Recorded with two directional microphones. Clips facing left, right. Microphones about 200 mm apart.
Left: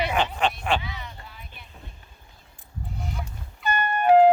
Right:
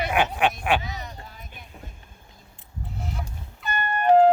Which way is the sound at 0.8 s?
45° right (ahead or behind).